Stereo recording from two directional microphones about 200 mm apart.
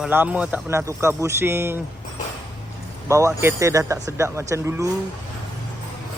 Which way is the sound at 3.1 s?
15° right (ahead or behind).